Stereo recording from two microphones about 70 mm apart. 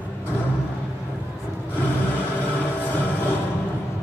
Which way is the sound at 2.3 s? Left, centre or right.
Left.